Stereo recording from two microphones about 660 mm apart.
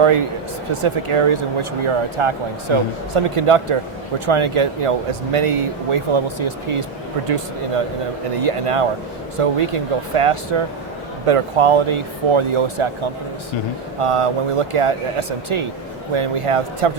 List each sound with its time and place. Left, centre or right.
0.0 s speech: right
14.0 s speech: right